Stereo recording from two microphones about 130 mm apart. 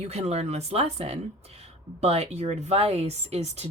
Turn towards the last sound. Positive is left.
turn(degrees=-55)  # may be behind; listen again after turning